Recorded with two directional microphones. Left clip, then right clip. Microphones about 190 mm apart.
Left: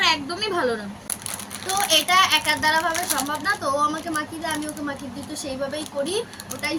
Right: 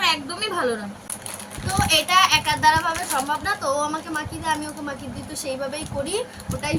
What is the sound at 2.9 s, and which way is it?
Speech, 60° left (ahead or behind).